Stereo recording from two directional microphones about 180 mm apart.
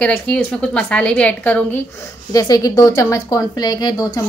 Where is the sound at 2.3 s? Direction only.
20° left (ahead or behind).